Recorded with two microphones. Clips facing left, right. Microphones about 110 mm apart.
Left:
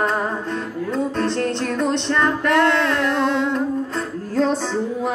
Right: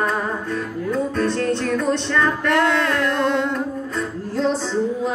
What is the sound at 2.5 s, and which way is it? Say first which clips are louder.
Music: left 1 dB; 5° right (ahead or behind).